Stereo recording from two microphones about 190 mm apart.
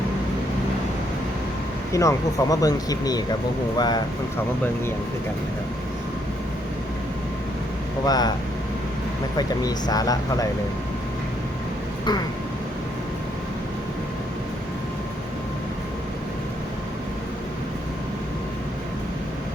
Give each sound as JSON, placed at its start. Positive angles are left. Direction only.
{"t": 1.9, "sound": "speech", "side_deg": 15}
{"t": 8.0, "sound": "speech", "side_deg": 20}
{"t": 9.4, "sound": "speech", "side_deg": 20}